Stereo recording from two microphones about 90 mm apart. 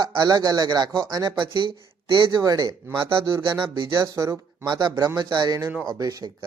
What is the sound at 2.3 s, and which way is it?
Speech, 40° right (ahead or behind).